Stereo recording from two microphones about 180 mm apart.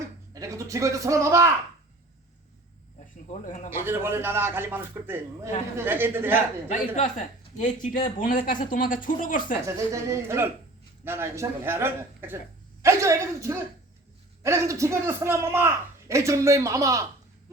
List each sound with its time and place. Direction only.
0.3 s a man's voice: 15° right (ahead or behind)
3.2 s speech: 45° left (ahead or behind)
3.7 s a man's voice: 15° right (ahead or behind)
6.7 s speech: 45° left (ahead or behind)
9.6 s a man's voice: 15° right (ahead or behind)